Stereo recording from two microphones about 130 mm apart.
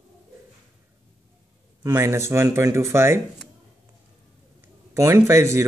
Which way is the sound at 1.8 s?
25° right (ahead or behind).